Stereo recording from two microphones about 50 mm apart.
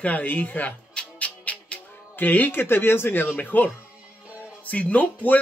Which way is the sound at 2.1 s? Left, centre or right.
Left.